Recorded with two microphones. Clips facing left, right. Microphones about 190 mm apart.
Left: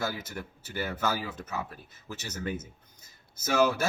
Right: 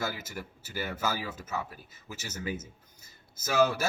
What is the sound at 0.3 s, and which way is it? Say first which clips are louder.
Speech: left 2 dB; 5° right (ahead or behind).